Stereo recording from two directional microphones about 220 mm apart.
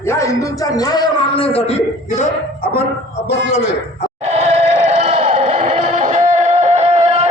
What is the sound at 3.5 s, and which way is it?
Speech, 30° left (ahead or behind).